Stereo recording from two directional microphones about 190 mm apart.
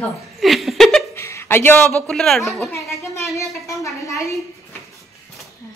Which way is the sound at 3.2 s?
15° left (ahead or behind).